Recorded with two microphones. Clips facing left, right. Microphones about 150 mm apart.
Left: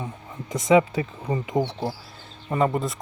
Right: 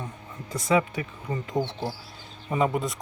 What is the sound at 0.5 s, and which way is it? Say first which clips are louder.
Speech: left 5 dB; 20° left (ahead or behind).